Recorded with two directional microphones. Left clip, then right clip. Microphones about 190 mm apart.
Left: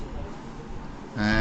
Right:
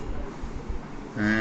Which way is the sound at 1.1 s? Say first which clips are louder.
Even; 60° left (ahead or behind).